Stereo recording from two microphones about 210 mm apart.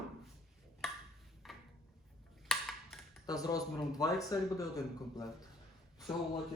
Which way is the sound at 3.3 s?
15° left (ahead or behind).